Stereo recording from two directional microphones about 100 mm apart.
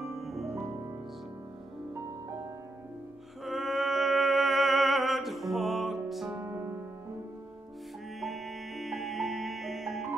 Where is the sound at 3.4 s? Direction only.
Centre (ahead or behind).